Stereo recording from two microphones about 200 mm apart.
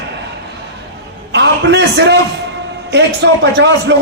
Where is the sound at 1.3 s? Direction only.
60° right (ahead or behind).